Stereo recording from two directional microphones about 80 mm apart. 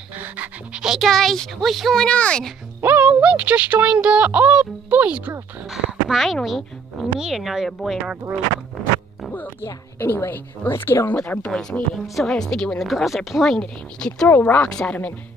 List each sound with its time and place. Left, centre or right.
0.2 s pant: centre
0.8 s speech: centre
2.0 s a child's voice: centre
2.8 s speech: right
6.0 s speech: centre
9.3 s a woman's voice: left
11.1 s a child's voice: centre
11.9 s speech: centre
14.3 s a woman's voice: left
14.7 s a child's voice: centre